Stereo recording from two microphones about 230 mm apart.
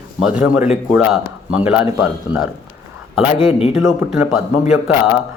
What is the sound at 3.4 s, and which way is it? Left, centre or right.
Speech, left.